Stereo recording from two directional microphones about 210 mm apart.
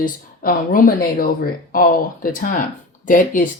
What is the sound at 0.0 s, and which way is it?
Speech, 40° left (ahead or behind).